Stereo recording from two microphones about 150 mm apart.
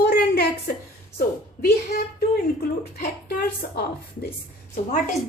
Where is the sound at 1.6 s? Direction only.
90° left.